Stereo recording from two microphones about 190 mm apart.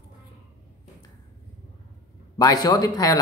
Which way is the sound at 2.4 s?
20° left (ahead or behind).